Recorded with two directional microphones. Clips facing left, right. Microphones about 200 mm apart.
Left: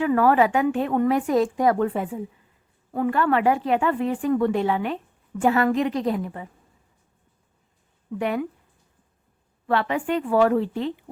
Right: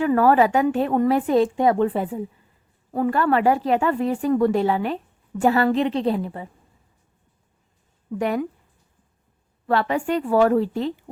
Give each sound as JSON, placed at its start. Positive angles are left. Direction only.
{"t": 0.0, "sound": "speech", "side_deg": -40}
{"t": 8.2, "sound": "speech", "side_deg": -40}
{"t": 9.6, "sound": "speech", "side_deg": -40}